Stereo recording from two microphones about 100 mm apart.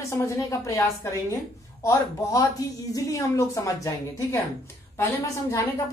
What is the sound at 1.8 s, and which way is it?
A woman's voice, 35° left (ahead or behind).